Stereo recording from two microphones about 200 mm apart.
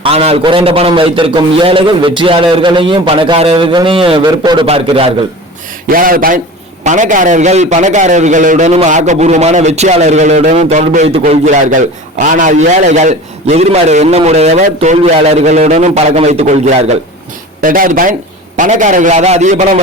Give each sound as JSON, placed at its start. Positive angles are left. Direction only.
{"t": 0.0, "sound": "a man's voice", "side_deg": -30}
{"t": 5.9, "sound": "a man's voice", "side_deg": -45}